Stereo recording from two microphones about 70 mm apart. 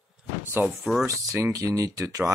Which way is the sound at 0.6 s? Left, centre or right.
Right.